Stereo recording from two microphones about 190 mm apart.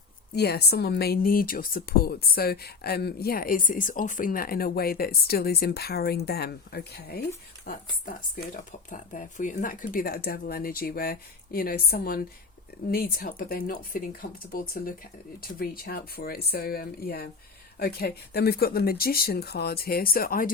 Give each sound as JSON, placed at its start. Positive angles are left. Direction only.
{"t": 0.3, "sound": "speech", "side_deg": 60}